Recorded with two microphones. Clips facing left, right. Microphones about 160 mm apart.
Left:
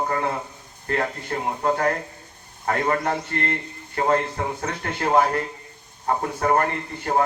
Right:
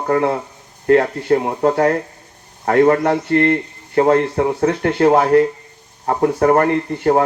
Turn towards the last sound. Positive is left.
turn(degrees=-50)  # may be behind; listen again after turning